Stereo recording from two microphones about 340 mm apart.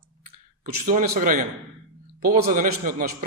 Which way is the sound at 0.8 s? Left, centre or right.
Right.